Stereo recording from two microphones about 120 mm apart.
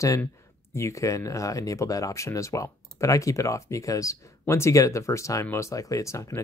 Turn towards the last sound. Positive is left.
turn(degrees=25)  # may be behind; listen again after turning